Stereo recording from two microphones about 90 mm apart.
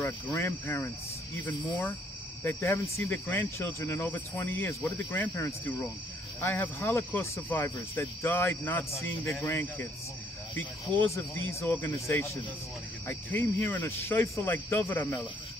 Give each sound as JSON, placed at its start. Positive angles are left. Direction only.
{"t": 0.0, "sound": "cricket", "side_deg": 30}
{"t": 2.4, "sound": "cricket", "side_deg": 30}